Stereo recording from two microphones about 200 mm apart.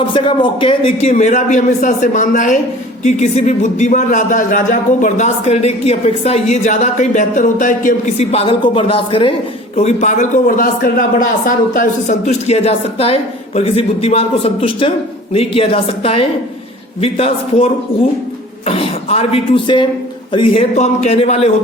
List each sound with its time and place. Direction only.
0.1 s speech: 25° left (ahead or behind)
9.7 s a man's voice: 35° left (ahead or behind)
18.7 s speech: 30° left (ahead or behind)